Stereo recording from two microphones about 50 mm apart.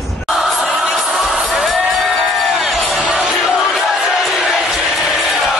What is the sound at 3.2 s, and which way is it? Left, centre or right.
Crowd, centre.